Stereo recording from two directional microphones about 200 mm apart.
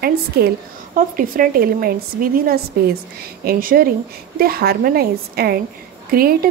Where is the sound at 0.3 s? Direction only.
50° right (ahead or behind).